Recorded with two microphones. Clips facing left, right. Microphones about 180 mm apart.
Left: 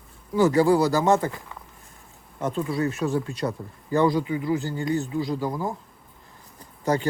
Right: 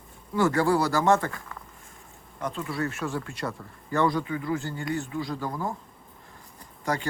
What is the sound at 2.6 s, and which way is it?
Speech, 20° left (ahead or behind).